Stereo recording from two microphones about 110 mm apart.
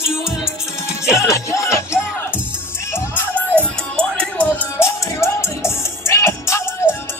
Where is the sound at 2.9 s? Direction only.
15° left (ahead or behind).